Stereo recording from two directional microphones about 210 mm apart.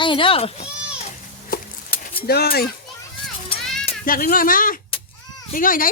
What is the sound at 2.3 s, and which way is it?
Speech, 50° left (ahead or behind).